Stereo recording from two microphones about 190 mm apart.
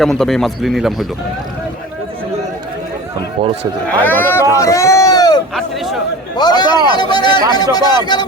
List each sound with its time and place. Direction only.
0.0 s a man's voice: centre (ahead or behind)
3.4 s a man's voice: 30° right (ahead or behind)
4.0 s speech: 10° left (ahead or behind)
4.5 s a sound: 15° left (ahead or behind)
5.5 s a sound: centre (ahead or behind)
6.3 s a man's voice: 20° left (ahead or behind)